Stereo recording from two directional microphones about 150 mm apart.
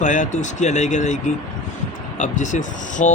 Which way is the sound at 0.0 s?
55° left (ahead or behind).